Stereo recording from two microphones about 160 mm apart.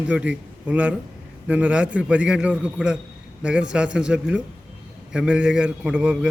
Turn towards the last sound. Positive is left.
turn(degrees=-5)  # may be behind; listen again after turning